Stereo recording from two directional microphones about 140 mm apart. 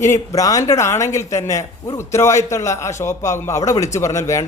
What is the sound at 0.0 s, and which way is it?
A man's voice, 20° left (ahead or behind).